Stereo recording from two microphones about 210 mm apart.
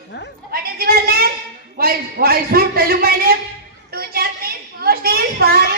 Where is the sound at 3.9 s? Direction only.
45° right (ahead or behind).